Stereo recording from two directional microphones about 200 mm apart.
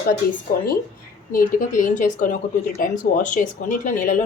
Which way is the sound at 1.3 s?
45° left (ahead or behind).